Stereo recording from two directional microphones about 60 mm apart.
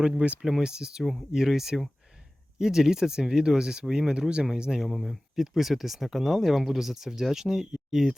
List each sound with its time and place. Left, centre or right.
0.0 s speech: centre
4.9 s speech: centre